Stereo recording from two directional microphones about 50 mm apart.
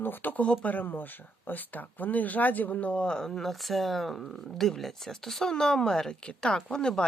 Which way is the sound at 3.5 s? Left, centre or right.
Centre.